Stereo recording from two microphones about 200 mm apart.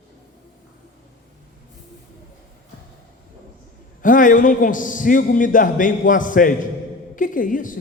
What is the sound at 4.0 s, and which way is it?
A man's voice, 40° left (ahead or behind).